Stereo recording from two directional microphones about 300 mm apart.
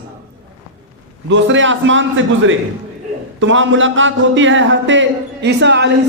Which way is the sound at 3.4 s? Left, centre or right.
Right.